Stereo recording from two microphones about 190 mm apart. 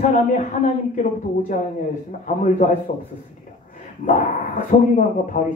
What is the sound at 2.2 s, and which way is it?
Speech, 40° left (ahead or behind).